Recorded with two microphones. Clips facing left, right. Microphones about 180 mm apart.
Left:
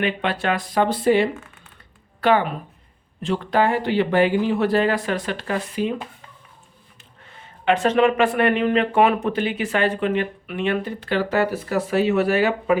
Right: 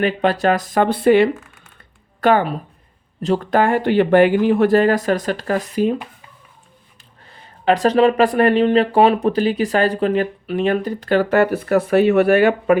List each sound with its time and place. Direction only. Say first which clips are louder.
0.0 s speech: right 6 dB; 40° right (ahead or behind); by 1.3 s 60° right (ahead or behind)
1.3 s a sound: right 6 dB; centre (ahead or behind)
2.2 s speech: right 3 dB; 40° right (ahead or behind)
7.3 s speech: right 3 dB; 35° right (ahead or behind); by 12.8 s 55° right (ahead or behind)